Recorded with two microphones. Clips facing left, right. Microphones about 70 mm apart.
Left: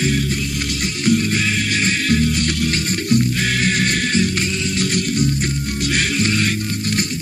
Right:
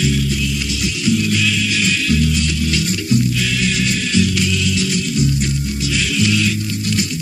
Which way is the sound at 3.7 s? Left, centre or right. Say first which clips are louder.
Left 1 dB; left.